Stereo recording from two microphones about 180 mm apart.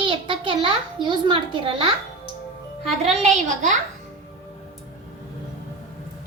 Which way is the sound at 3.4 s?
45° right (ahead or behind).